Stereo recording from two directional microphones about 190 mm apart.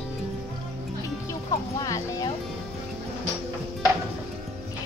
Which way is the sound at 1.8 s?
15° left (ahead or behind).